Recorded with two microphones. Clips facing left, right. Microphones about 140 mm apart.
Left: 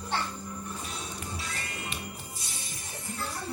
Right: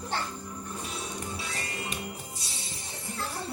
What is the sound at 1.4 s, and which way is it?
Music, 25° right (ahead or behind).